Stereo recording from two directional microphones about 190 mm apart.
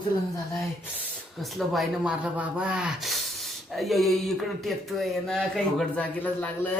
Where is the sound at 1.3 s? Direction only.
Centre (ahead or behind).